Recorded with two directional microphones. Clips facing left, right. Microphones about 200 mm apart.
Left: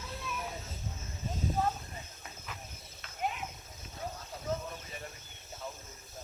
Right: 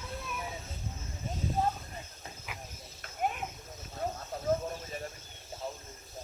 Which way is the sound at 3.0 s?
50° right (ahead or behind).